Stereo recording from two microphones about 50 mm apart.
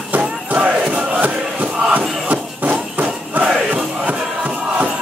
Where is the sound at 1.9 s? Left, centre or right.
Right.